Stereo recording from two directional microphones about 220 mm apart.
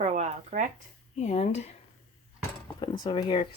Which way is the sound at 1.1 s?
30° left (ahead or behind).